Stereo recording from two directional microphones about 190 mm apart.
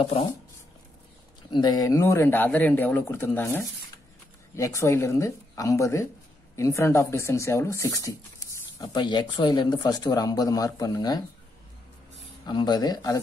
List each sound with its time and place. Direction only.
0.0 s speech: 30° left (ahead or behind)
1.5 s speech: 20° left (ahead or behind)
12.4 s speech: 20° left (ahead or behind)